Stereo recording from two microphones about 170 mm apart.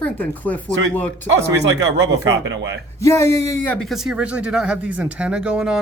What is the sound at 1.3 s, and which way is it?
Speech, 90° right.